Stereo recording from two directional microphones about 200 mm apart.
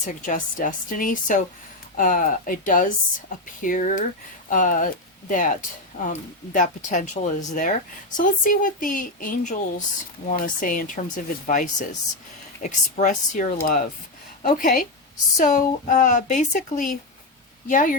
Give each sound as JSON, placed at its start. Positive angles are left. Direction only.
{"t": 0.0, "sound": "speech", "side_deg": 40}